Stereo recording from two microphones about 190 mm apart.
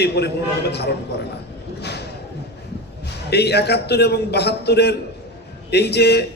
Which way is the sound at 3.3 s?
60° left (ahead or behind).